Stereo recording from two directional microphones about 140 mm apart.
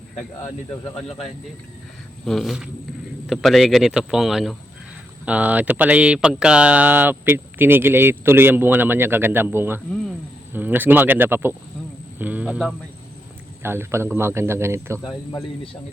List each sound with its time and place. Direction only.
2.2 s speech: centre (ahead or behind); by 15.0 s 20° right (ahead or behind)